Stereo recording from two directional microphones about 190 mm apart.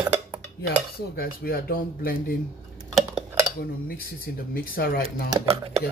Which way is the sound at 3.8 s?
50° left (ahead or behind).